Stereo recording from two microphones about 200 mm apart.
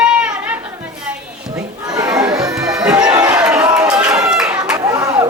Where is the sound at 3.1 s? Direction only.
10° right (ahead or behind).